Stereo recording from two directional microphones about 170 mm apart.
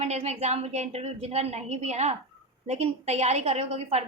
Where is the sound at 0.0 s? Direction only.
40° right (ahead or behind).